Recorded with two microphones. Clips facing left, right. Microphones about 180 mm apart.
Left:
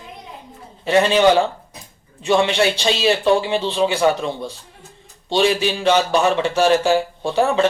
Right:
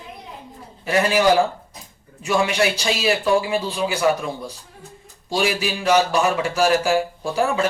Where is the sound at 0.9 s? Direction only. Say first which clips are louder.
Left 3 dB; 25° left (ahead or behind).